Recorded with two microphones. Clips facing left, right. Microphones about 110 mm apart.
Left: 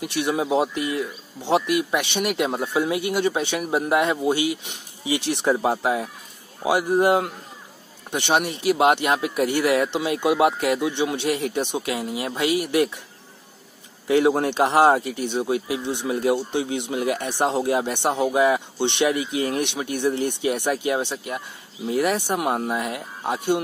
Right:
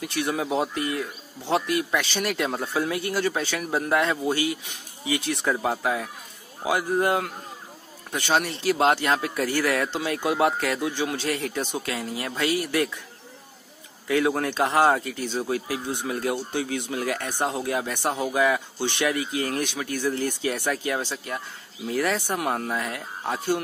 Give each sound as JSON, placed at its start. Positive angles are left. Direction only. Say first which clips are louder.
{"t": 0.0, "sound": "speech", "louder": "left 3 dB", "side_deg": 20}
{"t": 14.0, "sound": "speech", "louder": "left 4 dB", "side_deg": 25}